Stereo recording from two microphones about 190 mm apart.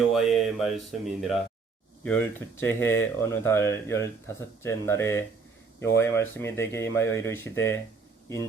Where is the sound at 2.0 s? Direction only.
10° left (ahead or behind).